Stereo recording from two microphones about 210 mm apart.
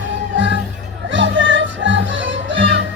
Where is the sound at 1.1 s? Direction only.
60° right (ahead or behind).